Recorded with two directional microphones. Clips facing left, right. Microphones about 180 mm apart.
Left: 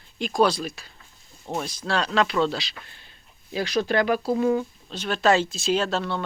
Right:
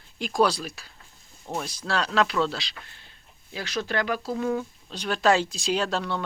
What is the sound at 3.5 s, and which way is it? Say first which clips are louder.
Speech: left 6 dB; 15° left (ahead or behind).